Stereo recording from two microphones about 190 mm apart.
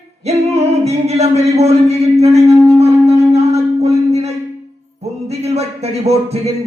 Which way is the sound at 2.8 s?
35° right (ahead or behind).